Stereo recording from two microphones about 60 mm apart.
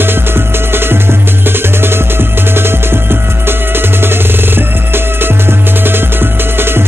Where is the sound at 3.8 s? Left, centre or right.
Right.